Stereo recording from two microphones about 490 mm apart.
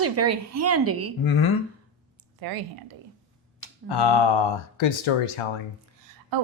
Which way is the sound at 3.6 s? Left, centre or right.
Left.